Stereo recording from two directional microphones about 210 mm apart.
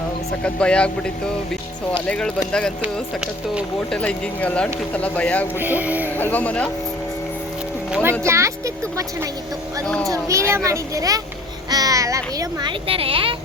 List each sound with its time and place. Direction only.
0.4 s speech: 5° left (ahead or behind)
3.9 s speech: 5° left (ahead or behind)
5.5 s speech: 10° right (ahead or behind)
6.1 s speech: 10° left (ahead or behind)
8.2 s a child's voice: 15° right (ahead or behind)